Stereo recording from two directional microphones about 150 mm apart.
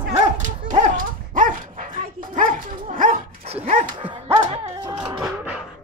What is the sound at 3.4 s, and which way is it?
Dog, 45° right (ahead or behind).